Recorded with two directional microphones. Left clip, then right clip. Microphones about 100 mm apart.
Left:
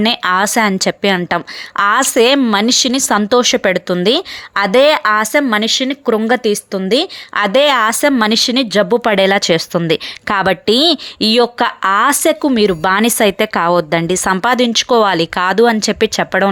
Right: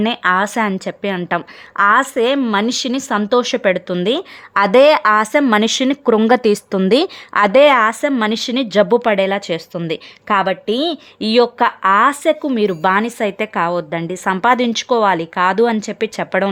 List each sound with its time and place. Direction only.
0.2 s a woman's voice: 45° left (ahead or behind); by 3.9 s 25° left (ahead or behind)
4.5 s a woman's voice: 5° left (ahead or behind)
8.2 s a woman's voice: 30° left (ahead or behind)
9.0 s speech: 35° left (ahead or behind)
10.4 s a woman's voice: 70° left (ahead or behind)
11.2 s speech: 30° left (ahead or behind)
11.8 s speech: 45° left (ahead or behind)
12.5 s a woman's voice: 25° left (ahead or behind)
12.9 s speech: 45° left (ahead or behind)
14.4 s speech: 30° left (ahead or behind)
15.5 s a woman's voice: 25° left (ahead or behind)
15.8 s speech: 35° left (ahead or behind)